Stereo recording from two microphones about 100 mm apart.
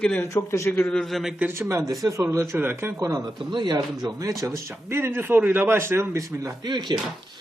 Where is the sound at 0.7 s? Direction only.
15° left (ahead or behind).